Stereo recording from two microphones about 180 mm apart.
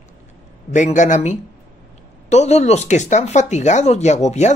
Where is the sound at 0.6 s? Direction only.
40° left (ahead or behind).